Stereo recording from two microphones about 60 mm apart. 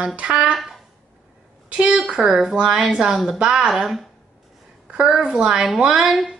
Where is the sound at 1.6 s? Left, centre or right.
Centre.